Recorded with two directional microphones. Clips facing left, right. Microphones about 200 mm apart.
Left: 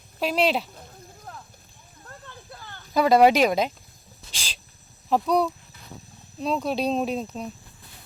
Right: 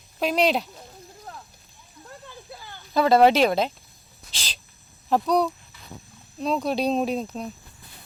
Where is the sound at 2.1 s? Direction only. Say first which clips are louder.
Right 2 dB; 5° right (ahead or behind).